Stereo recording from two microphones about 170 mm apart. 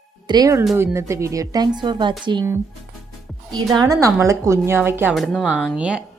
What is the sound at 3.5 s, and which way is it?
Speech, 20° right (ahead or behind).